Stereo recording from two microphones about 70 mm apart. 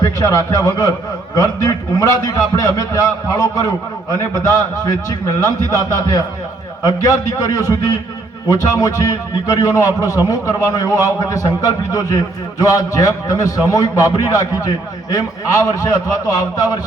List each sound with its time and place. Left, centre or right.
0.0 s a man's voice: left